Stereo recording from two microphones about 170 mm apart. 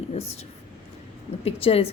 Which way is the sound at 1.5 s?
35° left (ahead or behind).